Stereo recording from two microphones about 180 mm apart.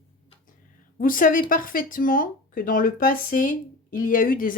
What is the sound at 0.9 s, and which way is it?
Speech, 50° left (ahead or behind).